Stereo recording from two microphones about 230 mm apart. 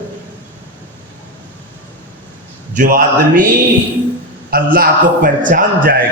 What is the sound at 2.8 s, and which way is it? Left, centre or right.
Speech, right.